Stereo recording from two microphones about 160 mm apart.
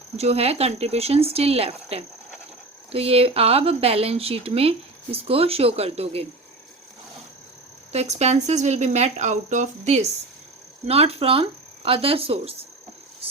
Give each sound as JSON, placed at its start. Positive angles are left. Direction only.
{"t": 0.2, "sound": "speech", "side_deg": -40}
{"t": 7.9, "sound": "speech", "side_deg": -45}